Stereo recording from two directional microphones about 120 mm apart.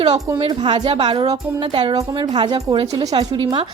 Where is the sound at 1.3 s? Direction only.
35° right (ahead or behind).